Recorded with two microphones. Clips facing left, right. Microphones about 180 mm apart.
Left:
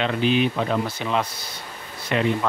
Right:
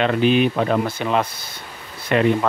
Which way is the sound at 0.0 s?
55° right (ahead or behind).